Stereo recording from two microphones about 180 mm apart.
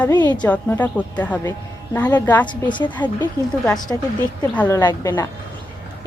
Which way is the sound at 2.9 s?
10° left (ahead or behind).